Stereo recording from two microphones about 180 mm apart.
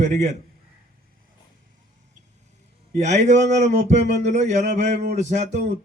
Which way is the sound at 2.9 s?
40° right (ahead or behind).